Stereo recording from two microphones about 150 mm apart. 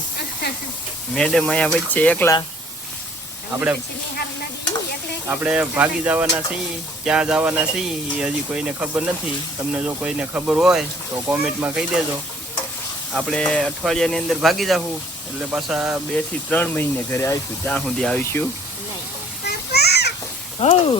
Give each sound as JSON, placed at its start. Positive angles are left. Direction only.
{"t": 1.1, "sound": "speech", "side_deg": 5}
{"t": 5.3, "sound": "speech", "side_deg": -5}
{"t": 13.1, "sound": "speech", "side_deg": 5}
{"t": 16.1, "sound": "speech", "side_deg": 10}
{"t": 17.7, "sound": "speech", "side_deg": 5}
{"t": 19.5, "sound": "children playing", "side_deg": 90}
{"t": 20.6, "sound": "speech", "side_deg": 40}